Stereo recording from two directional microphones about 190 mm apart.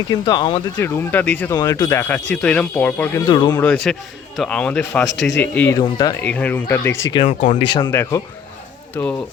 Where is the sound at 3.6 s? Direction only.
5° left (ahead or behind).